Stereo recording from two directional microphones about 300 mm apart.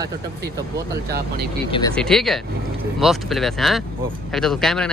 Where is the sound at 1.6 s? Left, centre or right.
Centre.